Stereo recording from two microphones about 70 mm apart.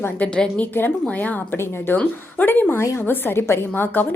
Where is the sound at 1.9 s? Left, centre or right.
Left.